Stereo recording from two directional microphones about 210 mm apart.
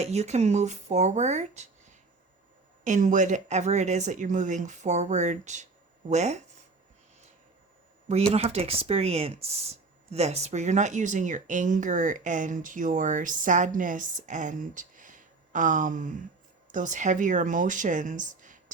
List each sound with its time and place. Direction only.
0.0 s speech: 30° right (ahead or behind)
8.3 s speech: 30° right (ahead or behind)